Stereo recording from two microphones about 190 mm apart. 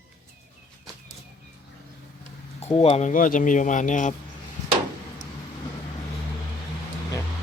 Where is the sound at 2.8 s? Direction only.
30° left (ahead or behind).